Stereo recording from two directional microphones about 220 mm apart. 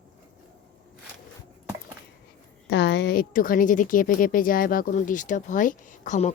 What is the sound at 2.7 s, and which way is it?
A woman's voice, 55° left (ahead or behind).